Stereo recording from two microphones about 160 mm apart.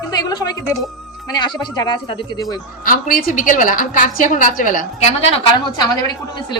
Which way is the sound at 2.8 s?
60° left (ahead or behind).